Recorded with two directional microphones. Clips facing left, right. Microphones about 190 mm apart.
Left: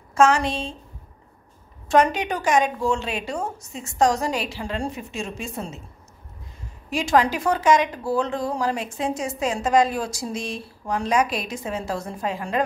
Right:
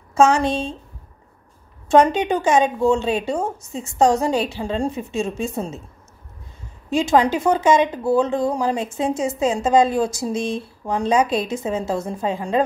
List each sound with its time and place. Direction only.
0.1 s a woman's voice: 25° right (ahead or behind)
1.9 s speech: 25° right (ahead or behind)
6.9 s speech: 25° right (ahead or behind)